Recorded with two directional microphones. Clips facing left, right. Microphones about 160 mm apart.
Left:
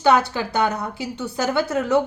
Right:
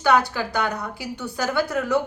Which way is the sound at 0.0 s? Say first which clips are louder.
Left 2 dB; 25° left (ahead or behind).